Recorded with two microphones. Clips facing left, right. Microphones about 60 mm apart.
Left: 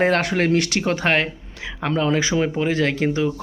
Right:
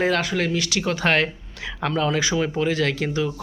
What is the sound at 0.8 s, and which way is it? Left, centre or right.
Speech, left.